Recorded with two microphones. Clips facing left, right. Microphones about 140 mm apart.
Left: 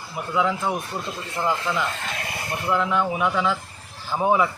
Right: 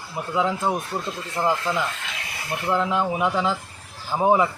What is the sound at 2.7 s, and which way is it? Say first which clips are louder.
Speech: even; 30° right (ahead or behind).